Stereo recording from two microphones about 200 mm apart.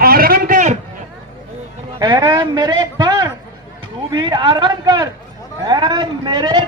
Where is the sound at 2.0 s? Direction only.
20° right (ahead or behind).